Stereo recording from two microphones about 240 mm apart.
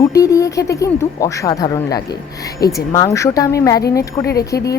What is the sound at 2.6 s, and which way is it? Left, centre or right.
Speech, left.